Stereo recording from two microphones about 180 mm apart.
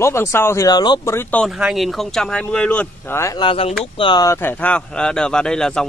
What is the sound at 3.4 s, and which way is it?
Speech, 30° left (ahead or behind).